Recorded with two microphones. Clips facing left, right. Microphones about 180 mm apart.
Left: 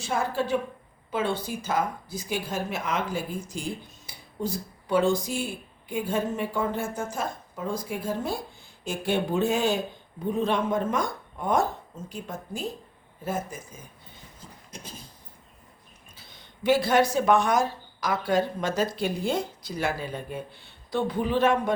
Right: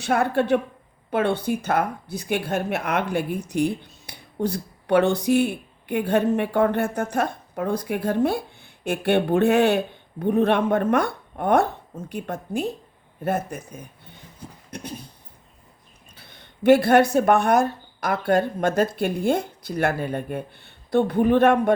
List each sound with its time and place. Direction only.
0.0 s a woman's voice: 65° right (ahead or behind)
14.7 s a sound: 65° right (ahead or behind)
16.1 s speech: 60° right (ahead or behind)